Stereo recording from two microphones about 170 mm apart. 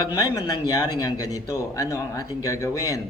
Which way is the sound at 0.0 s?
20° left (ahead or behind).